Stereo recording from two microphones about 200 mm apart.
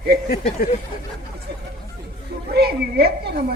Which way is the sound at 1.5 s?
55° right (ahead or behind).